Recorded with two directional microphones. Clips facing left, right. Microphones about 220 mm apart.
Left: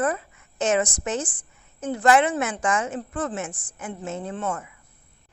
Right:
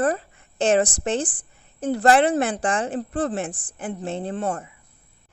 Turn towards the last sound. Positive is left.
turn(degrees=-35)  # may be behind; listen again after turning